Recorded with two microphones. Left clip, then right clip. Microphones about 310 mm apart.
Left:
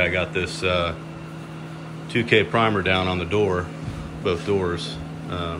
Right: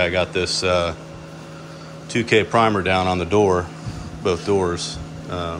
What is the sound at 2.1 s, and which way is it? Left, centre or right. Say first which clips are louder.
Speech: right 2 dB; centre.